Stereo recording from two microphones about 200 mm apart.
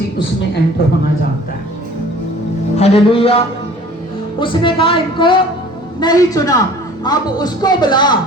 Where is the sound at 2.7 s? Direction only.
30° left (ahead or behind).